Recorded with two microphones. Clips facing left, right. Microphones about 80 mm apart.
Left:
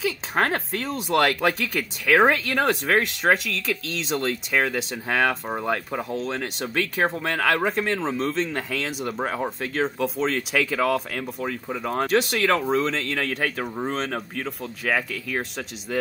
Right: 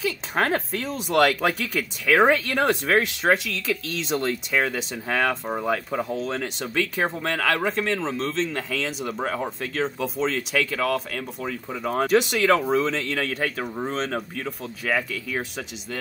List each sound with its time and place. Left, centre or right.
0.4 s speech: centre